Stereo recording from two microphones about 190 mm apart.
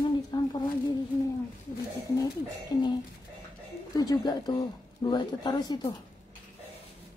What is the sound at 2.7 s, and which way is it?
Speech, 20° left (ahead or behind).